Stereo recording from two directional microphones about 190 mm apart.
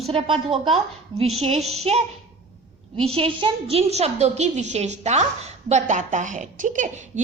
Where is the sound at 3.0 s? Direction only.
30° right (ahead or behind).